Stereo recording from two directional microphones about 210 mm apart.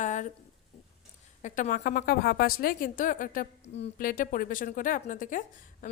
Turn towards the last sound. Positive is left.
turn(degrees=40)  # may be behind; listen again after turning